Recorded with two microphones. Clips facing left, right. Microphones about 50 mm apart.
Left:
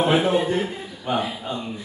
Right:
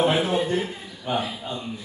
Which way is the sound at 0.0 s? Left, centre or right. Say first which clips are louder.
Left 2 dB; centre.